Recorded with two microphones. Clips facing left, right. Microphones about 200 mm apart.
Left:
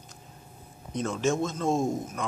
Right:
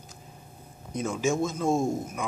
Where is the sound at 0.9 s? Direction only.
5° right (ahead or behind).